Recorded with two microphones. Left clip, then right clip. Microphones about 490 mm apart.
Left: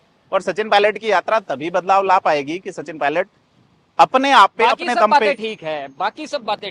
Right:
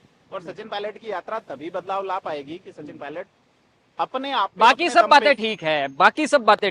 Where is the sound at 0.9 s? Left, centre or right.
Left.